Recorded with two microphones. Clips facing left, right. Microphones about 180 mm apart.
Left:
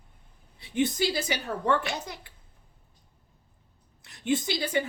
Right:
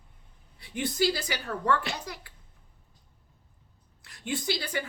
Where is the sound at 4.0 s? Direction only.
20° left (ahead or behind).